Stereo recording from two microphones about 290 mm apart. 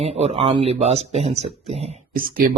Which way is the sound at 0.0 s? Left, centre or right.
Right.